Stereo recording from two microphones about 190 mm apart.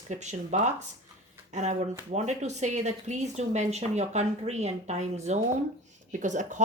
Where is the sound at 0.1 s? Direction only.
40° right (ahead or behind).